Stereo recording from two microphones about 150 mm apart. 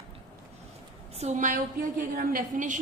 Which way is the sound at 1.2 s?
55° right (ahead or behind).